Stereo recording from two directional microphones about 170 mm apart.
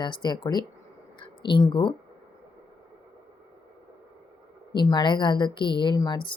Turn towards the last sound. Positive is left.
turn(degrees=25)  # may be behind; listen again after turning